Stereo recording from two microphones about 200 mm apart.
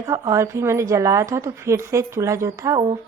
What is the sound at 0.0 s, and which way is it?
Speech, 15° right (ahead or behind).